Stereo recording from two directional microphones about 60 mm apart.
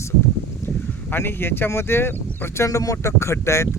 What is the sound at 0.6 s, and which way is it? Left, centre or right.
Speech, left.